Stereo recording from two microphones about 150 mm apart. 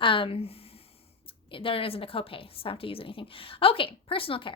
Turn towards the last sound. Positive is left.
turn(degrees=35)  # may be behind; listen again after turning